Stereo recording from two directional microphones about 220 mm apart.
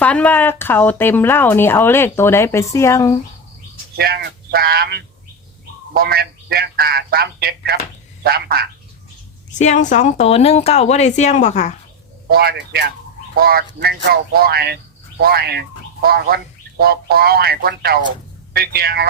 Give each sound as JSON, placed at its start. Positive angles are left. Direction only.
{"t": 0.0, "sound": "speech", "side_deg": 5}
{"t": 3.9, "sound": "a man's voice", "side_deg": -45}
{"t": 9.6, "sound": "speech", "side_deg": 35}
{"t": 12.3, "sound": "a man's voice", "side_deg": -45}